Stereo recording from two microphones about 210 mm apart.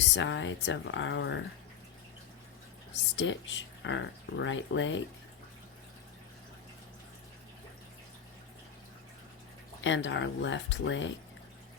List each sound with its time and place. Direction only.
0.1 s speech: 60° left (ahead or behind)
3.2 s speech: 60° left (ahead or behind)
9.8 s speech: 60° left (ahead or behind)